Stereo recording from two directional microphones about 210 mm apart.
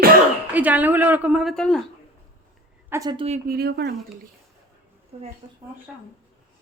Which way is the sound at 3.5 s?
50° right (ahead or behind).